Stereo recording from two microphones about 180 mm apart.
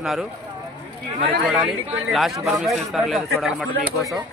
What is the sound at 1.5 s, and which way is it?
Speech, centre (ahead or behind).